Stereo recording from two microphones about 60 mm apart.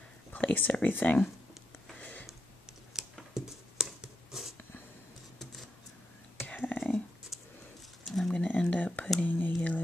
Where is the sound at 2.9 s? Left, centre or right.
Centre.